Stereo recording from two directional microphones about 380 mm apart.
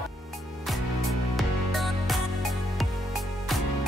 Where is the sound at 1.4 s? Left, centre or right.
Centre.